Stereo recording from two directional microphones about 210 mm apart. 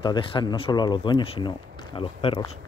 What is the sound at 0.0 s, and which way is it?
Speech, 25° left (ahead or behind).